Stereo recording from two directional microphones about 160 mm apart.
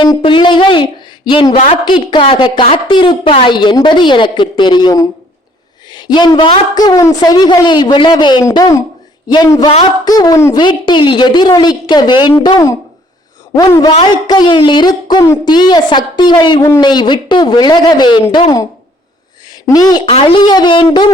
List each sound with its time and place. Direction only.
0.0 s a woman's voice: 30° left (ahead or behind)
19.6 s a woman's voice: 25° left (ahead or behind)
20.1 s a woman's voice: 35° left (ahead or behind)